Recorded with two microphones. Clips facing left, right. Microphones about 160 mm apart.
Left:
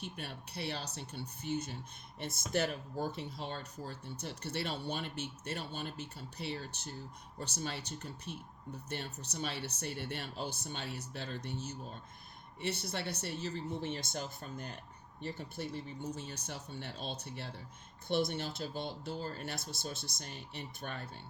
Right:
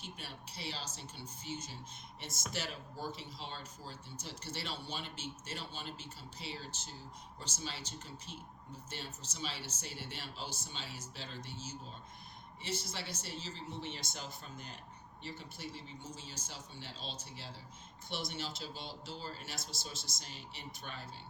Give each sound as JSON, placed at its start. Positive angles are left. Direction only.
{"t": 0.0, "sound": "speech", "side_deg": 60}